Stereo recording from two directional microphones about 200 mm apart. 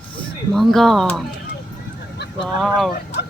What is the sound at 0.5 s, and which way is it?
Speech, centre (ahead or behind).